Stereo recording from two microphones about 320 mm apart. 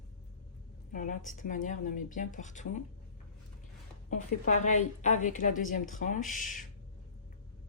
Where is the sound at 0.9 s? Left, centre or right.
Left.